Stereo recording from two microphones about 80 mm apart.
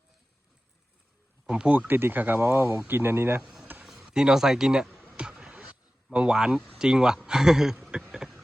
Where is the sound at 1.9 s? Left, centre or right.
Right.